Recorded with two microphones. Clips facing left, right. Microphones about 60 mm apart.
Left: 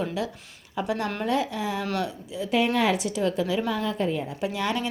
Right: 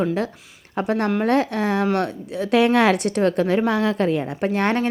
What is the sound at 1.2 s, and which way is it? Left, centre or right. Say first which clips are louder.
A woman's voice: right 4 dB; right.